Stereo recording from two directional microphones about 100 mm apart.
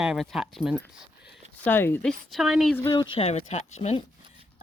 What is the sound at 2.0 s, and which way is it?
Speech, centre (ahead or behind).